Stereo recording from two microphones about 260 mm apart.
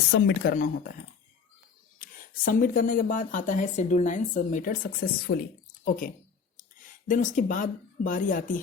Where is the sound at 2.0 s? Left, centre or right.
Left.